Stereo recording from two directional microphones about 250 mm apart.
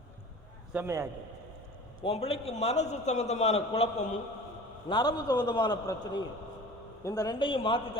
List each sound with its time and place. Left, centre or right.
0.7 s a man's voice: centre
2.0 s a man's voice: left